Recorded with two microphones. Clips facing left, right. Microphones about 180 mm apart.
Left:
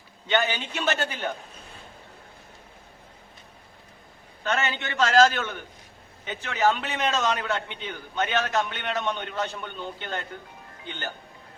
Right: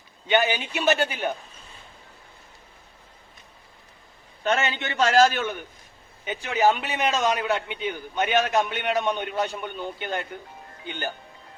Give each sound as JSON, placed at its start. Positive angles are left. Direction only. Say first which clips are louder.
{"t": 0.3, "sound": "a man's voice", "louder": "right 3 dB", "side_deg": -10}
{"t": 4.4, "sound": "a man's voice", "louder": "right 3 dB", "side_deg": -20}